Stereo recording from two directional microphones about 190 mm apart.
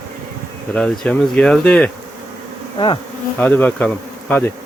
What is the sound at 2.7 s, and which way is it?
Bee, 25° left (ahead or behind).